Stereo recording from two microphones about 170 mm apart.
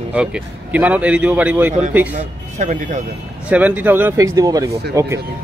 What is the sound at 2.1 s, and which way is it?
Speech, 50° right (ahead or behind).